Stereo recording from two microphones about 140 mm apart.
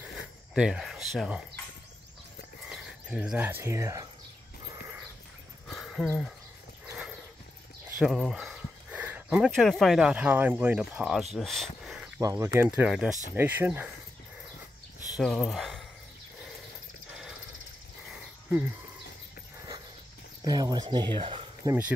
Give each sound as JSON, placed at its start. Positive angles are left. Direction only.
{"t": 0.6, "sound": "speech", "side_deg": -5}
{"t": 2.7, "sound": "speech", "side_deg": -5}
{"t": 5.7, "sound": "a sound", "side_deg": 0}
{"t": 6.0, "sound": "speech", "side_deg": 0}
{"t": 8.0, "sound": "speech", "side_deg": 0}
{"t": 11.3, "sound": "a sound", "side_deg": 0}
{"t": 12.2, "sound": "speech", "side_deg": -25}
{"t": 12.6, "sound": "speech", "side_deg": -10}
{"t": 15.1, "sound": "speech", "side_deg": 0}
{"t": 20.4, "sound": "speech", "side_deg": -30}
{"t": 21.6, "sound": "speech", "side_deg": -15}